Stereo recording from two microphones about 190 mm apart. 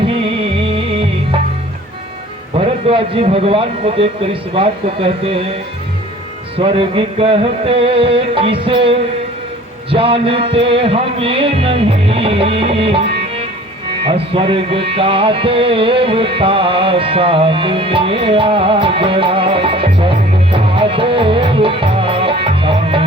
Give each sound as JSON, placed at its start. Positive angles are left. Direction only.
{"t": 0.6, "sound": "music", "side_deg": -30}
{"t": 2.6, "sound": "music", "side_deg": -30}
{"t": 6.6, "sound": "music", "side_deg": -25}